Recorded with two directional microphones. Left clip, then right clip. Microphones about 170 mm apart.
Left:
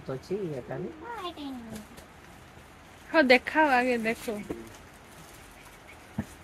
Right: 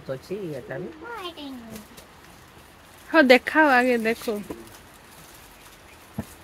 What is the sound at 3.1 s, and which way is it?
Speech, 70° right (ahead or behind).